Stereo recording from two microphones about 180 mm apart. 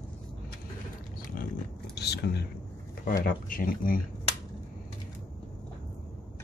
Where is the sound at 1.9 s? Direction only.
65° left (ahead or behind).